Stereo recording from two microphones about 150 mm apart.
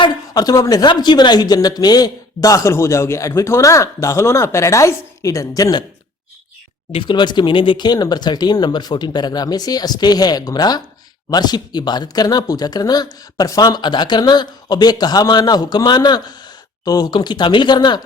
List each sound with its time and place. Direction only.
0.0 s a woman's voice: 25° left (ahead or behind)
6.9 s a woman's voice: 30° left (ahead or behind)